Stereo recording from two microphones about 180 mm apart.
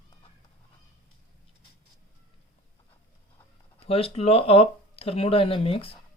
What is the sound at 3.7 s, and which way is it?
Speech, 30° left (ahead or behind).